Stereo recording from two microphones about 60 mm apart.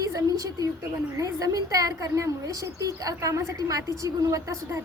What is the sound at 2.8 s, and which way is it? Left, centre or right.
Speech, right.